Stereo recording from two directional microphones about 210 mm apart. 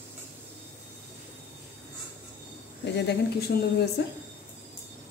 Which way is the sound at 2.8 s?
55° left (ahead or behind).